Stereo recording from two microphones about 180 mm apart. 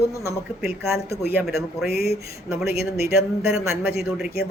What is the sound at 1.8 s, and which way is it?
Speech, 60° left (ahead or behind).